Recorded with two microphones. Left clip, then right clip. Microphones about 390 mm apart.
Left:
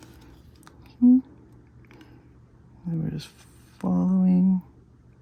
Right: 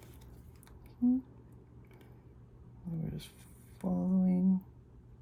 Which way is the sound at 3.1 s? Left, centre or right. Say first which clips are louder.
Left 9 dB; centre.